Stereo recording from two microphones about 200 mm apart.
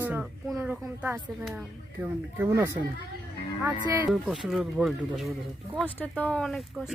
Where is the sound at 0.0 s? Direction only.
5° right (ahead or behind).